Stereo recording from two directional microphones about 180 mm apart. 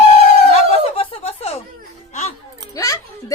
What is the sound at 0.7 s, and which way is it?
Snicker, 35° left (ahead or behind).